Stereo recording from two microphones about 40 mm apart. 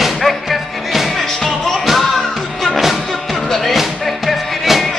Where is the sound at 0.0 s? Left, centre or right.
Centre.